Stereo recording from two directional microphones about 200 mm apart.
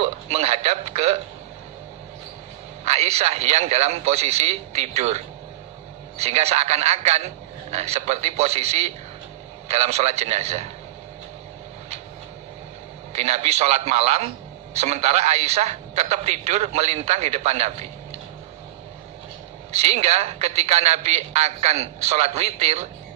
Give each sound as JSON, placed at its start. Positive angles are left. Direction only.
{"t": 0.0, "sound": "a woman's voice", "side_deg": -30}
{"t": 2.8, "sound": "a woman's voice", "side_deg": -30}
{"t": 13.1, "sound": "a woman's voice", "side_deg": -30}
{"t": 19.7, "sound": "a woman's voice", "side_deg": -30}